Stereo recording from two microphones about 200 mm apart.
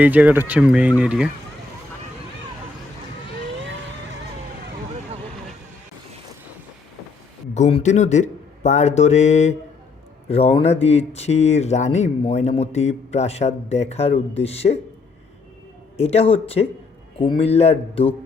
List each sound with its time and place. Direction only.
0.0 s speech: 10° right (ahead or behind)
7.5 s speech: 35° left (ahead or behind)
16.0 s speech: 30° left (ahead or behind)